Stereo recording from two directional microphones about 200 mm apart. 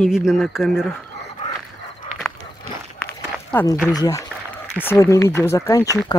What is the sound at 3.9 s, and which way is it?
Speech, 15° left (ahead or behind).